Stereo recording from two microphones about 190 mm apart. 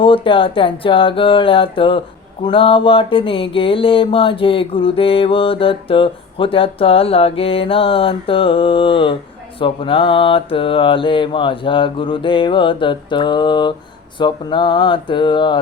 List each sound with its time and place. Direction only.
0.0 s mantra: 25° left (ahead or behind)